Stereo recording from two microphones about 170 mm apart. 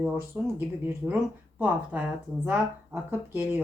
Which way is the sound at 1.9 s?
10° right (ahead or behind).